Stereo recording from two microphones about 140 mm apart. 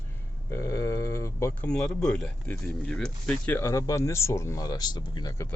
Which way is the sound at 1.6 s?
5° left (ahead or behind).